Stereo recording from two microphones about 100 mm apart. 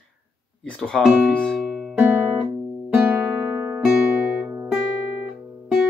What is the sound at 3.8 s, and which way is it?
Guitar, 10° right (ahead or behind).